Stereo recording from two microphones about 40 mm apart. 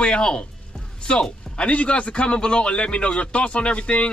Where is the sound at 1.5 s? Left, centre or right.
Left.